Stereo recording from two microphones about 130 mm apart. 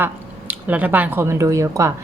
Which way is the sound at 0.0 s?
10° right (ahead or behind).